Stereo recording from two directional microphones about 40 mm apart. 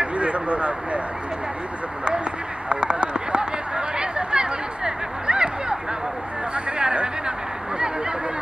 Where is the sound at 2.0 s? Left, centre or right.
Right.